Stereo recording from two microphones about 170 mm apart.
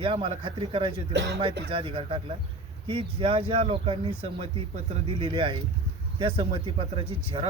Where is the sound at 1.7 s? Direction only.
30° right (ahead or behind).